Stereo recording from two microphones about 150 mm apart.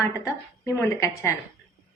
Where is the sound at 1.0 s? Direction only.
20° left (ahead or behind).